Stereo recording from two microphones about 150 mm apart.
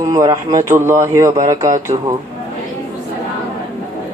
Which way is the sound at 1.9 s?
40° right (ahead or behind).